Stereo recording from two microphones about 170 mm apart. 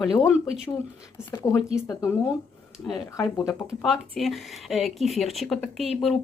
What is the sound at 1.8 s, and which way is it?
Speech, 20° left (ahead or behind).